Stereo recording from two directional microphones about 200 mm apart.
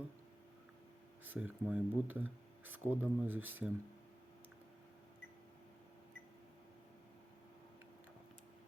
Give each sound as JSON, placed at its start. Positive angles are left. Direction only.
{"t": 1.2, "sound": "speech", "side_deg": -10}